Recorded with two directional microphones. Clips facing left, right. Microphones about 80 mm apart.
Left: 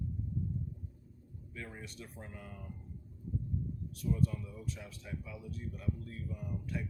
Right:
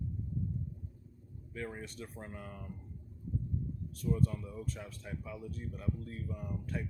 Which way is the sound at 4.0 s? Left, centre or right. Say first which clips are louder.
Right 1 dB; right.